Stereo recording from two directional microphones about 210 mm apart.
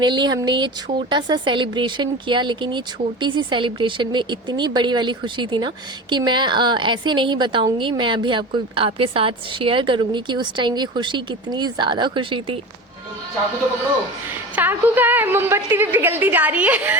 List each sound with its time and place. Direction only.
0.0 s a woman's voice: 20° right (ahead or behind)
14.5 s a woman's voice: 10° right (ahead or behind)